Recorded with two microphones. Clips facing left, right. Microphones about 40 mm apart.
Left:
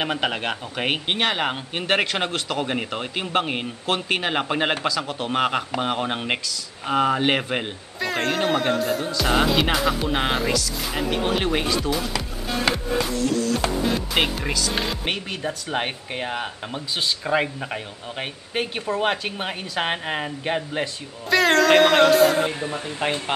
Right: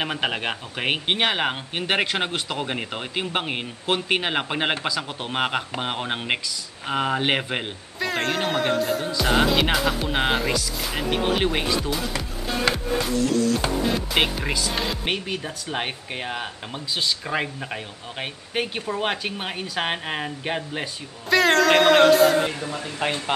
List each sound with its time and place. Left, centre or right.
0.0 s speech: centre
1.0 s a man's voice: centre
12.6 s music: centre
13.9 s speech: centre
22.5 s speech: left